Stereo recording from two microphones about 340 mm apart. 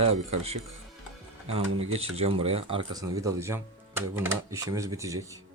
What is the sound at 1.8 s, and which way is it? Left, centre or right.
Speech, centre.